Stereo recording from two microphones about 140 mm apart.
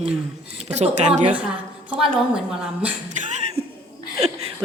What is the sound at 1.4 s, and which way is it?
A woman's voice, 5° right (ahead or behind).